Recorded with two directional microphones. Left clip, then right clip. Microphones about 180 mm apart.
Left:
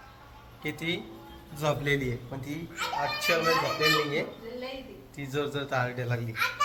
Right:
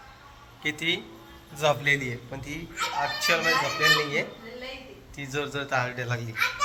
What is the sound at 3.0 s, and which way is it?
A child's voice, 5° left (ahead or behind).